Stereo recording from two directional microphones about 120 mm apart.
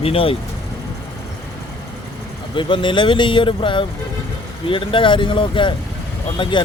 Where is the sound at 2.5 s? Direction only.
45° left (ahead or behind).